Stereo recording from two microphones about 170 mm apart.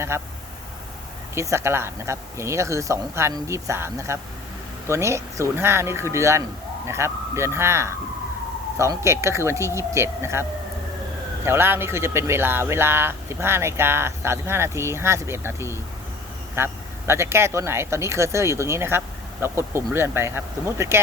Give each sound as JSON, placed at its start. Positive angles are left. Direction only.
{"t": 0.1, "sound": "speech", "side_deg": -15}
{"t": 1.4, "sound": "speech", "side_deg": -15}
{"t": 11.4, "sound": "speech", "side_deg": -15}